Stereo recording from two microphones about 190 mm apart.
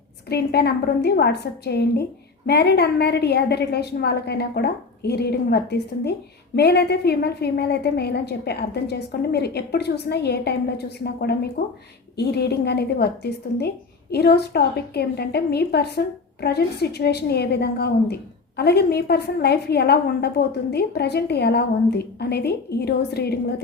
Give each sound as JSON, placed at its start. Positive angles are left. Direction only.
{"t": 0.3, "sound": "a woman's voice", "side_deg": 60}